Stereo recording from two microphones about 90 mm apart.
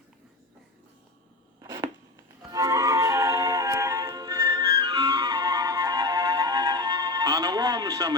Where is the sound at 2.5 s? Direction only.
40° right (ahead or behind).